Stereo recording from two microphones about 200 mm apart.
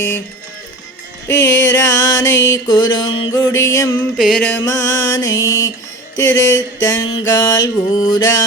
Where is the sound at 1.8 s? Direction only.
15° left (ahead or behind).